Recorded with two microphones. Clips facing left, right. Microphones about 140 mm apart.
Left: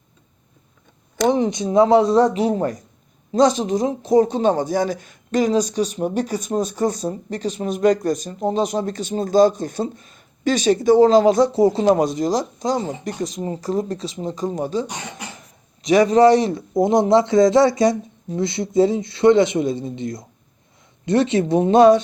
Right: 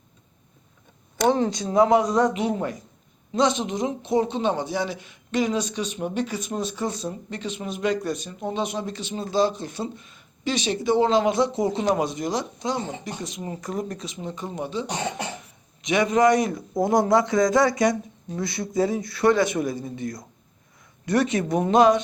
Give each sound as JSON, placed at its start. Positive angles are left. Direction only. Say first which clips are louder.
{"t": 1.3, "sound": "speech", "louder": "left 4 dB", "side_deg": 20}